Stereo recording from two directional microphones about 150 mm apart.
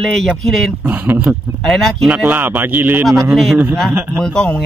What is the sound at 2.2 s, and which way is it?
Speech, 10° right (ahead or behind).